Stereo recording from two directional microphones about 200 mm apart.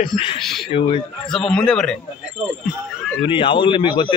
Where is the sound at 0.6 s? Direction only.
25° left (ahead or behind).